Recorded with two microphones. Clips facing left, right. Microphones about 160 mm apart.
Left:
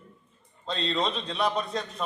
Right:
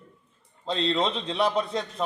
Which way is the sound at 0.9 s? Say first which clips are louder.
Right 3 dB; 25° right (ahead or behind).